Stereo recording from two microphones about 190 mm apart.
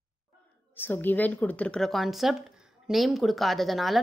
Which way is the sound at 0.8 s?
10° left (ahead or behind).